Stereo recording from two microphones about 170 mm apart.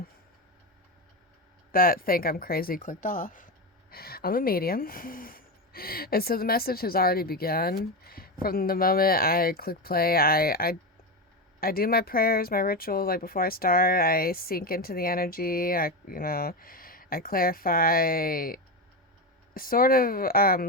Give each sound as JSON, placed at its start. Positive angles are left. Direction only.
{"t": 1.7, "sound": "speech", "side_deg": 60}
{"t": 3.9, "sound": "speech", "side_deg": 65}